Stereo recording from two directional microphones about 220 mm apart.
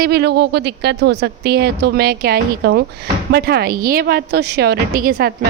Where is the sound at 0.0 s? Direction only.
45° right (ahead or behind).